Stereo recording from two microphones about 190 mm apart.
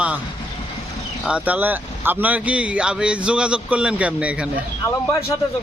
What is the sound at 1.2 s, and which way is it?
Speech, 5° right (ahead or behind).